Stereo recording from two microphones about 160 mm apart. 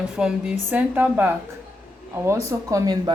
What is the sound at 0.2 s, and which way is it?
A woman's voice, 5° right (ahead or behind).